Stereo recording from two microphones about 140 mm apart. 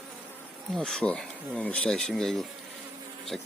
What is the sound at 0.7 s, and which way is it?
Speech, 5° left (ahead or behind).